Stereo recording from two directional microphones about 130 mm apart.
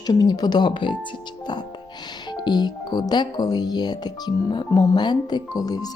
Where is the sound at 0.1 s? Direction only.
30° left (ahead or behind).